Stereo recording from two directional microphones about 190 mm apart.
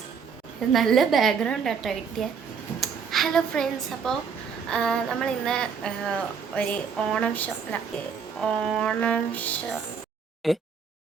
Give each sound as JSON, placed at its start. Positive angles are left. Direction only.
{"t": 0.7, "sound": "a woman's voice", "side_deg": 0}